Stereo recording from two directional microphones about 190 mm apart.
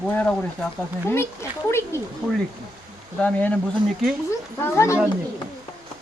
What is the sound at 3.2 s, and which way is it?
Speech, 10° left (ahead or behind).